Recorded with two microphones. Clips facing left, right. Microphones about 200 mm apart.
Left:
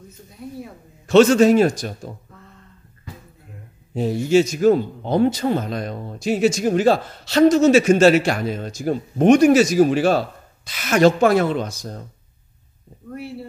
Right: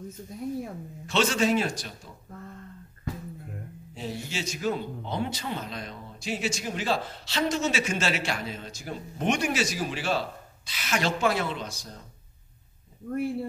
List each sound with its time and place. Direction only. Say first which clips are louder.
1.0 s speech: left 13 dB; 45° left (ahead or behind)
3.9 s speech: left 18 dB; 50° left (ahead or behind)
13.1 s speech: right 3 dB; 50° right (ahead or behind)